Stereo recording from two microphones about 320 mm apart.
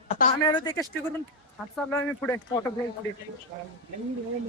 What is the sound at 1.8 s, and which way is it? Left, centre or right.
Speech, centre.